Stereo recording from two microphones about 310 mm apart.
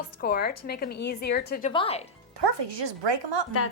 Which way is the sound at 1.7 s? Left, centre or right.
Centre.